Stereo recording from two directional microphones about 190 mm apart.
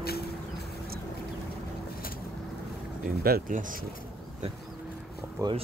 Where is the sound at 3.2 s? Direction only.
50° right (ahead or behind).